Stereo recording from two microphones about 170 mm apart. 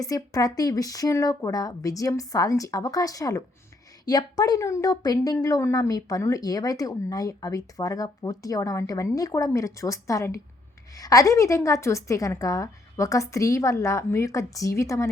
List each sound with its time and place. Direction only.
0.0 s a woman's voice: 20° left (ahead or behind)